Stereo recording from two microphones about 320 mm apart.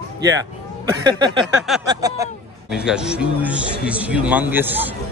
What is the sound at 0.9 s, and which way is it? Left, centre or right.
Speech, centre.